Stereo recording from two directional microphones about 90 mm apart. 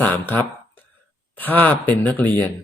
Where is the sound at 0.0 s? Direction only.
20° left (ahead or behind).